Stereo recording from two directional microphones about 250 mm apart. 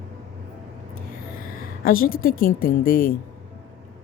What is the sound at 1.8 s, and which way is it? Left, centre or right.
A woman's voice, left.